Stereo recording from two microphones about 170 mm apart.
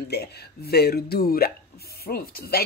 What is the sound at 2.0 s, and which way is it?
Spray, 65° left (ahead or behind).